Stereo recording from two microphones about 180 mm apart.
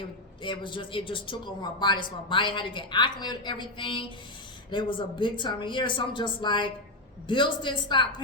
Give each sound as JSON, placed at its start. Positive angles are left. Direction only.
{"t": 0.4, "sound": "speech", "side_deg": 25}